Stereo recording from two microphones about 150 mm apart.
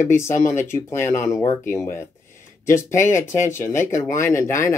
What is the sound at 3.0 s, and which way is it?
Speech, 15° left (ahead or behind).